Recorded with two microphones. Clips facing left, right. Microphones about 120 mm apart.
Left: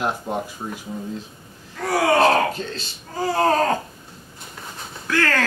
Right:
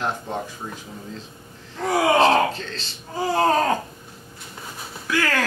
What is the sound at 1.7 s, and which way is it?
Wail, 20° right (ahead or behind).